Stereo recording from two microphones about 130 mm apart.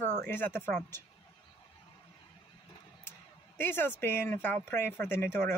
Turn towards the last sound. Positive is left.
turn(degrees=15)  # may be behind; listen again after turning